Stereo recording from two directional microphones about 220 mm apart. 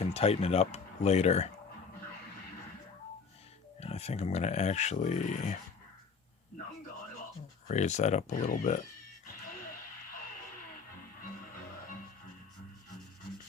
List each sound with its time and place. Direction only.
0.0 s speech: 30° left (ahead or behind)
3.8 s speech: 30° left (ahead or behind)
7.7 s speech: 30° left (ahead or behind)